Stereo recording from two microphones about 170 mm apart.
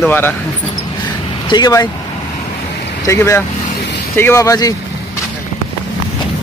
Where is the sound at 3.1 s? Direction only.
15° left (ahead or behind).